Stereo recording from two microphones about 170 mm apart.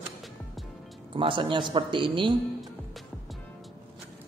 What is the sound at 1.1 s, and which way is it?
Speech, 30° right (ahead or behind).